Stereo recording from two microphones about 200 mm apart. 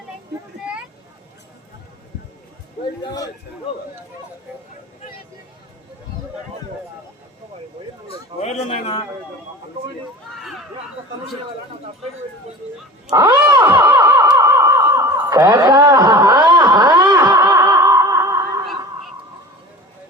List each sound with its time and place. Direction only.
3.0 s a man's voice: 20° left (ahead or behind)
8.4 s a man's voice: 35° left (ahead or behind)
13.1 s wild animals: 10° right (ahead or behind)
13.7 s a sound: 10° right (ahead or behind)
14.3 s wail: 15° right (ahead or behind)
17.0 s snicker: 20° right (ahead or behind)
18.6 s fowl: centre (ahead or behind)